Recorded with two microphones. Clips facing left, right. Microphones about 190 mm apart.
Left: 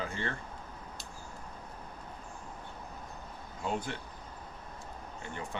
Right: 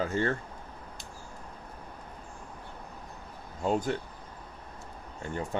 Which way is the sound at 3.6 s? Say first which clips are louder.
Right 7 dB; 40° right (ahead or behind).